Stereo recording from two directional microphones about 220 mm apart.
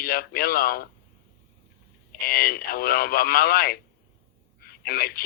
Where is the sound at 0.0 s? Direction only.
45° left (ahead or behind).